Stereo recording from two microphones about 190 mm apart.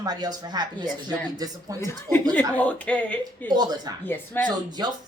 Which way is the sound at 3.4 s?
20° right (ahead or behind).